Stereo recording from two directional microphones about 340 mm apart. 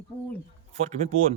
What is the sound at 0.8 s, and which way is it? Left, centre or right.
Speech, centre.